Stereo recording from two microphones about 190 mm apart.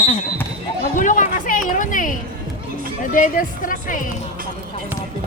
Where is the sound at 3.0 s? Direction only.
45° left (ahead or behind).